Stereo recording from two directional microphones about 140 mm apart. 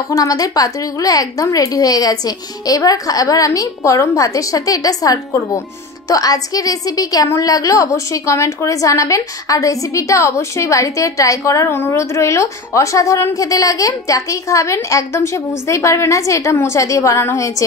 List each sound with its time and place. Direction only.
0.1 s a woman's voice: 25° left (ahead or behind)